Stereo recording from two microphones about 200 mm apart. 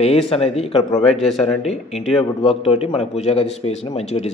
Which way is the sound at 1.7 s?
30° left (ahead or behind).